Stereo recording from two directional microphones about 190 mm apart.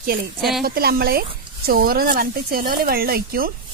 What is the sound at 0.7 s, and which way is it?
Speech, 55° right (ahead or behind).